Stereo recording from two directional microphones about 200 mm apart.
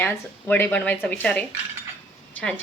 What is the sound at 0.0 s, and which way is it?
Speech, 10° left (ahead or behind).